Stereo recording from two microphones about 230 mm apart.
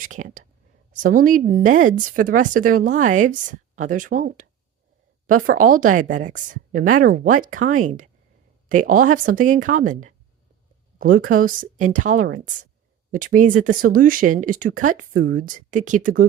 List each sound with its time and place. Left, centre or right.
0.0 s whispering: right
0.9 s speech: right